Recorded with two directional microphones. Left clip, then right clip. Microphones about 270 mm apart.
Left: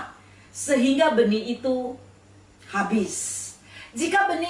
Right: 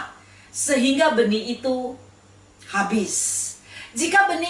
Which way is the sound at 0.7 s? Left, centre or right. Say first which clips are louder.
Right 1 dB; centre.